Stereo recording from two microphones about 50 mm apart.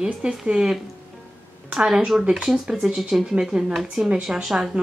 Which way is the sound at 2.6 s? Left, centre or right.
Centre.